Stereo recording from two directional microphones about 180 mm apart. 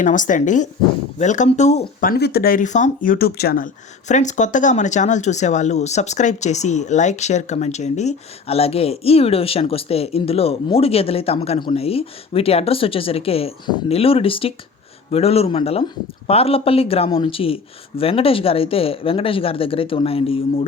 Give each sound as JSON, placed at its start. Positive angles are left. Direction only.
{"t": 0.0, "sound": "speech", "side_deg": 45}
{"t": 1.8, "sound": "speech", "side_deg": 55}
{"t": 4.1, "sound": "speech", "side_deg": 40}